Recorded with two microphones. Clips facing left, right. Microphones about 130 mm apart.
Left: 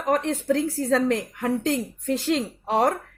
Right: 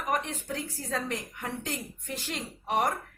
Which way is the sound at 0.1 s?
90° left.